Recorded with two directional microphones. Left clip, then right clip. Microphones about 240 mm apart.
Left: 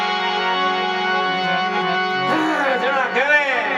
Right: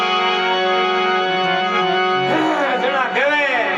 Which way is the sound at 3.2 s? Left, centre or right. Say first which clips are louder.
Left 2 dB; centre.